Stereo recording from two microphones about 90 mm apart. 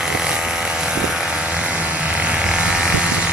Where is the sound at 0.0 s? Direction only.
5° right (ahead or behind).